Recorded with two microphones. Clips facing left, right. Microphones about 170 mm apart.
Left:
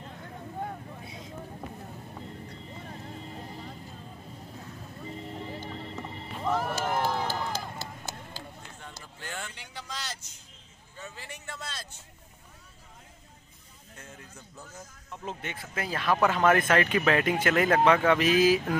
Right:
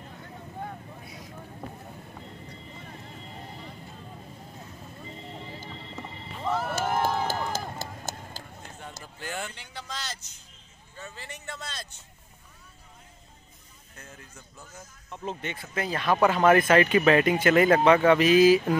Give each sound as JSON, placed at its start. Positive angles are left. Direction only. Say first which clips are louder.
{"t": 1.0, "sound": "vehicle", "louder": "left 1 dB", "side_deg": 25}
{"t": 6.4, "sound": "run", "louder": "even", "side_deg": 0}
{"t": 6.7, "sound": "run", "louder": "right 2 dB", "side_deg": -50}
{"t": 9.2, "sound": "a sound", "louder": "right 4 dB", "side_deg": -10}
{"t": 9.6, "sound": "speech", "louder": "right 1 dB", "side_deg": 10}
{"t": 15.2, "sound": "speech", "louder": "right 3 dB", "side_deg": 5}